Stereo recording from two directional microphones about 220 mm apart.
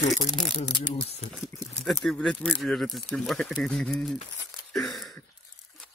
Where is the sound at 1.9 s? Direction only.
Centre (ahead or behind).